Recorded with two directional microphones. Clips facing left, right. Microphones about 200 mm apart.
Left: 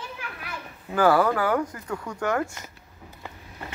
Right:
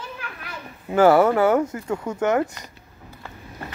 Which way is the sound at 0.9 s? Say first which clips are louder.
Right 5 dB; 25° right (ahead or behind).